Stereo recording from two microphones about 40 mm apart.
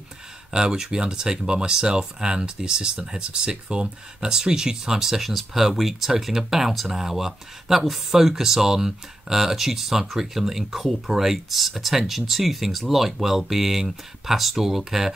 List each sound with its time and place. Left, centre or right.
0.5 s speech: centre